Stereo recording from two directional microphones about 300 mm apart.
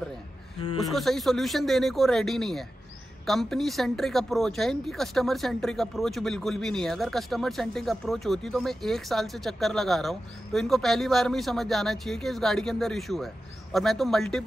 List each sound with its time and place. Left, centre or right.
0.6 s speech: centre
0.9 s speech: centre